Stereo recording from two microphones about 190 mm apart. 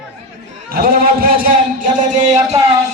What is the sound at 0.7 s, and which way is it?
A man's voice, 50° right (ahead or behind).